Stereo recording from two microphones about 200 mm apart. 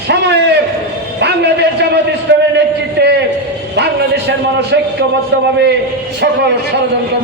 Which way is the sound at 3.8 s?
55° right (ahead or behind).